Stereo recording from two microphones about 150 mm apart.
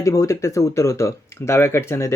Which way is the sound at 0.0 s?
20° left (ahead or behind).